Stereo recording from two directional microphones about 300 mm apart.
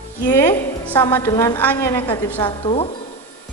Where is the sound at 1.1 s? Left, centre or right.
Centre.